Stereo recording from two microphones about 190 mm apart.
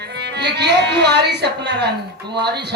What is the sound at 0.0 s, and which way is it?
Speech, 60° right (ahead or behind).